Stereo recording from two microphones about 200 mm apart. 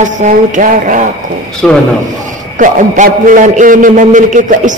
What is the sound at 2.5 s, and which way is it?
A man's voice, 40° right (ahead or behind).